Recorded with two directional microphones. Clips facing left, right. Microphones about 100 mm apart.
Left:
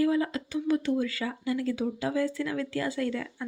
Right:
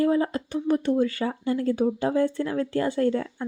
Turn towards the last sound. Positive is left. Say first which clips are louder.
# right 7 dB
turn(degrees=-35)  # may be behind; listen again after turning